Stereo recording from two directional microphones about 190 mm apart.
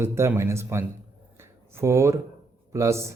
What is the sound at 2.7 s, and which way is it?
Speech, 15° right (ahead or behind).